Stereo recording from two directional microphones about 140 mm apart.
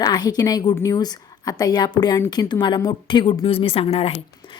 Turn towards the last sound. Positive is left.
turn(degrees=45)  # may be behind; listen again after turning